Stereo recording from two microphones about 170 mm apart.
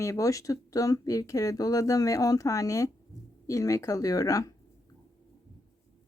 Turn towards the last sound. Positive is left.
turn(degrees=20)  # may be behind; listen again after turning